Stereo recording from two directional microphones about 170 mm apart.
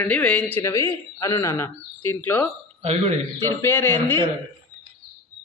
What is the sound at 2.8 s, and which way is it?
Speech, 35° right (ahead or behind).